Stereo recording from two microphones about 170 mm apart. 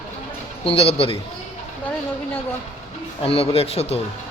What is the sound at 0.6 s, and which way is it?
Speech, 35° left (ahead or behind).